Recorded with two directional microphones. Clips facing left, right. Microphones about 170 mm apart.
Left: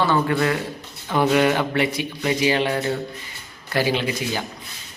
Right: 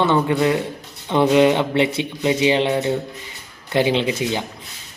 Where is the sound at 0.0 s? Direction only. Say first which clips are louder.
Right 3 dB; 20° right (ahead or behind).